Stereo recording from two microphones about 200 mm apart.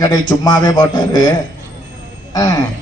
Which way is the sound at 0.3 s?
20° left (ahead or behind).